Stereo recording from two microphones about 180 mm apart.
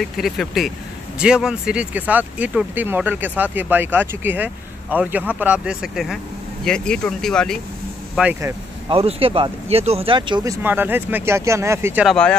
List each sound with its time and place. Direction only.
0.0 s speech: centre (ahead or behind)
8.2 s speech: 10° right (ahead or behind)
8.8 s speech: 30° right (ahead or behind); by 12.1 s 10° right (ahead or behind)
12.1 s speech: 5° left (ahead or behind)